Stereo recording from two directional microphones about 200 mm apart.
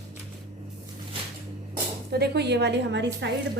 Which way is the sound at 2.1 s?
55° right (ahead or behind).